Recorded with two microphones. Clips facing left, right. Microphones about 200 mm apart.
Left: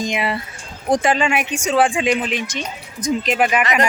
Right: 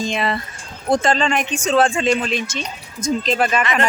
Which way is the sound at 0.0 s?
10° left (ahead or behind).